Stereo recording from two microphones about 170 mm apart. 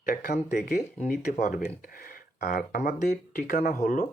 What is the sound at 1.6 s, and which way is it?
Speech, 60° left (ahead or behind).